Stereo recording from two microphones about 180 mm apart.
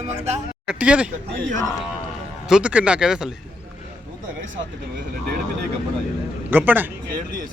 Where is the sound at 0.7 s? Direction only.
5° right (ahead or behind).